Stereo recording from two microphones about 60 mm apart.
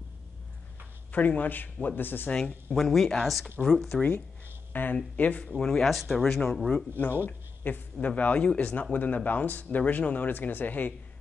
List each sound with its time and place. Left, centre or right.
1.1 s speech: left
2.7 s speech: centre
4.7 s speech: left
5.5 s speech: centre
7.2 s speech: left